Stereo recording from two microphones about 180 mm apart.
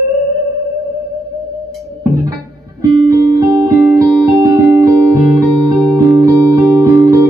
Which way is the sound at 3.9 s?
20° right (ahead or behind).